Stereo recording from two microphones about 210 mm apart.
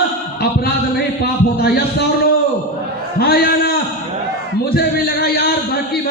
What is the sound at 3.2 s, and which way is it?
A man's voice, 50° left (ahead or behind).